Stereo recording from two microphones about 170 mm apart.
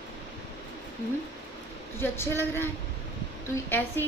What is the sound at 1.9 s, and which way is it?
Speech, 15° left (ahead or behind).